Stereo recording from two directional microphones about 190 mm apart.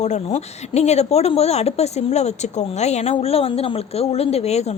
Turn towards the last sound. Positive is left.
turn(degrees=35)  # may be behind; listen again after turning